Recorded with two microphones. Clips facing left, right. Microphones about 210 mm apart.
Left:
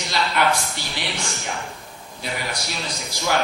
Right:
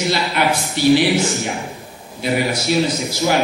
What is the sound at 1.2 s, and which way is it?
A man's voice, 20° right (ahead or behind).